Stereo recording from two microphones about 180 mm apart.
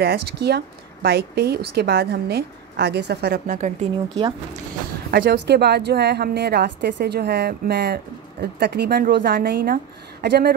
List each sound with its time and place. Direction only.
0.0 s a woman's voice: 65° right (ahead or behind); by 3.9 s 45° right (ahead or behind)
5.1 s a woman's voice: 65° right (ahead or behind)
10.2 s speech: 70° right (ahead or behind)